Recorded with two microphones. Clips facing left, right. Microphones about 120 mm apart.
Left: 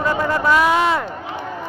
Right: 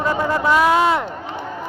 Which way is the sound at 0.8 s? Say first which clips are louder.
Right 1 dB; 5° right (ahead or behind).